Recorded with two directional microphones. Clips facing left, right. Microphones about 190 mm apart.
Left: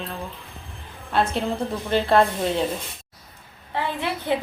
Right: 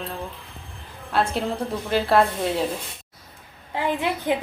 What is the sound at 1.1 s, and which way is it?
A woman's voice, centre (ahead or behind).